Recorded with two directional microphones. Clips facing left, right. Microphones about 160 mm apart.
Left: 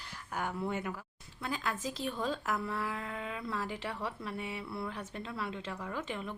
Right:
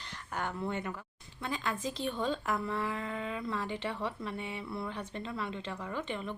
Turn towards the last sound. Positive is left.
turn(degrees=0)  # may be behind; listen again after turning